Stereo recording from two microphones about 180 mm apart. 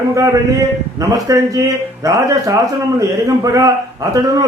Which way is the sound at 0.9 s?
20° right (ahead or behind).